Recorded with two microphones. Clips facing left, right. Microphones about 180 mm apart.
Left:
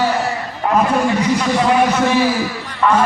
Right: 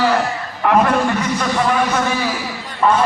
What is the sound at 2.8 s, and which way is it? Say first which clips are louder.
Speech: even; 30° right (ahead or behind).